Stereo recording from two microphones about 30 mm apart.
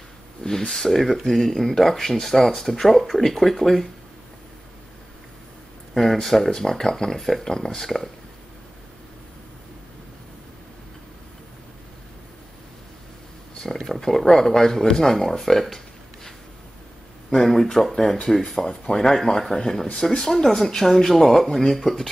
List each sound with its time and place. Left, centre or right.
0.4 s speech: centre
2.7 s speech: centre
6.2 s speech: centre
13.6 s speech: centre
17.3 s speech: centre